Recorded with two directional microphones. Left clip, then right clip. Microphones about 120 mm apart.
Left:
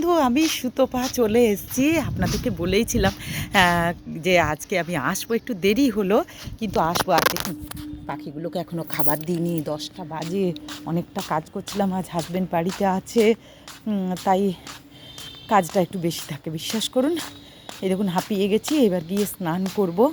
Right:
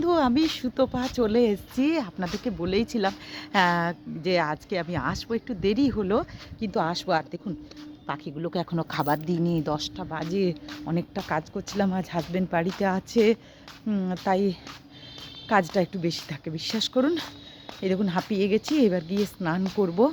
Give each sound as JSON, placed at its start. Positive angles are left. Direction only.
{"t": 0.0, "sound": "a woman's voice", "side_deg": 5}
{"t": 8.0, "sound": "speech", "side_deg": -5}
{"t": 9.7, "sound": "speech", "side_deg": -15}
{"t": 10.3, "sound": "a woman's voice", "side_deg": 5}
{"t": 14.3, "sound": "a woman's voice", "side_deg": 15}
{"t": 16.9, "sound": "speech", "side_deg": 0}
{"t": 17.8, "sound": "a woman's voice", "side_deg": 10}